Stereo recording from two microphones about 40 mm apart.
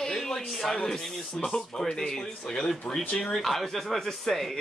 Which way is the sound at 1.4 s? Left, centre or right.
Left.